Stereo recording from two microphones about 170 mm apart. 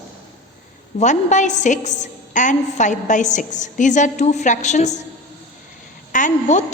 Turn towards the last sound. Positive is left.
turn(degrees=45)  # may be behind; listen again after turning